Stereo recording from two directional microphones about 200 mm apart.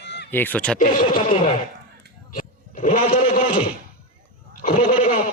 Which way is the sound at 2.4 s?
40° left (ahead or behind).